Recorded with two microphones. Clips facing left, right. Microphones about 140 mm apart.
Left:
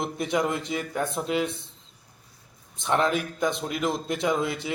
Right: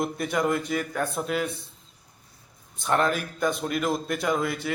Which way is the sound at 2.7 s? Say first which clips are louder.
Even; 20° left (ahead or behind).